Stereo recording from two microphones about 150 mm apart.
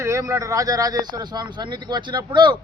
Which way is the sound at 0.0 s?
20° right (ahead or behind).